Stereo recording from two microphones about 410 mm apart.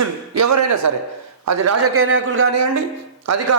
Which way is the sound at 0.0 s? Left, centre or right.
Right.